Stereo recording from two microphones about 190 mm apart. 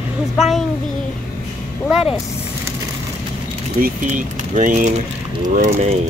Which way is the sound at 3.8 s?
45° right (ahead or behind).